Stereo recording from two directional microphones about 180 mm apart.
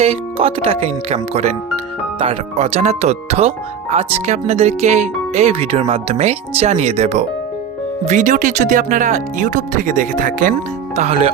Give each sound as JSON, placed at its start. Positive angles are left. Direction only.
{"t": 0.0, "sound": "speech", "side_deg": -35}
{"t": 10.9, "sound": "speech", "side_deg": -35}